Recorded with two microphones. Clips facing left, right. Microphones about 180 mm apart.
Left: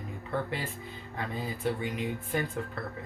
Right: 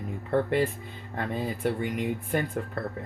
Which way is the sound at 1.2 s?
60° right (ahead or behind).